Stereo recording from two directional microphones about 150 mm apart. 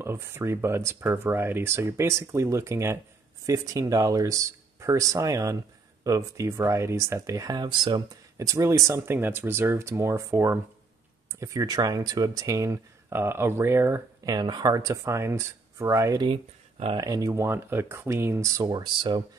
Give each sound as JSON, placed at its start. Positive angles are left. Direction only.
{"t": 0.0, "sound": "speech", "side_deg": -15}